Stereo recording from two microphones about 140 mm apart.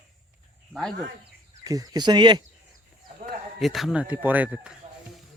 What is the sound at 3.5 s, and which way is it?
Speech, centre (ahead or behind).